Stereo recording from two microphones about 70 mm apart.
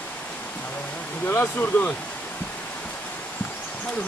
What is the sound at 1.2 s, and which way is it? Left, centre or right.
Speech, left.